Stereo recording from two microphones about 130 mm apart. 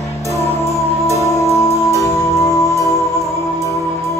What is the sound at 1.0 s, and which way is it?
Music, 25° left (ahead or behind).